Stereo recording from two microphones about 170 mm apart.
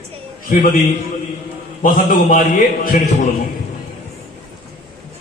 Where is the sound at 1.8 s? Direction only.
50° left (ahead or behind).